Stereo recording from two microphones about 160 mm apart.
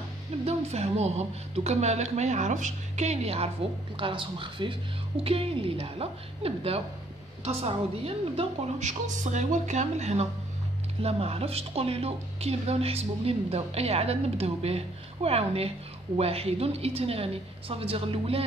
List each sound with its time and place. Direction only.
0.5 s a woman's voice: 40° right (ahead or behind)